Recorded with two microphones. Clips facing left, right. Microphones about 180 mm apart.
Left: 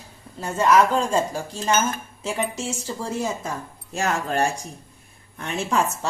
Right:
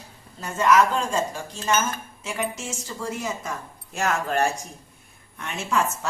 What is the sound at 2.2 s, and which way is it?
A woman's voice, 30° left (ahead or behind).